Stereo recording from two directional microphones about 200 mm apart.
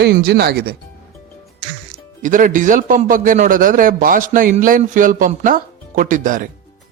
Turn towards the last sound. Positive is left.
turn(degrees=-40)  # may be behind; listen again after turning